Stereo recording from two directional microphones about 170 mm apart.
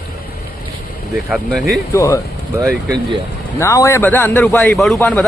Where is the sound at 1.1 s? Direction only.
5° right (ahead or behind).